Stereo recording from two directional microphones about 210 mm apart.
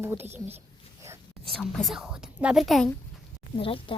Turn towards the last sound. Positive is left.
turn(degrees=25)  # may be behind; listen again after turning